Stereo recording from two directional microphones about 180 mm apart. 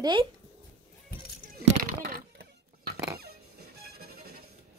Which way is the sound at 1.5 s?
60° right (ahead or behind).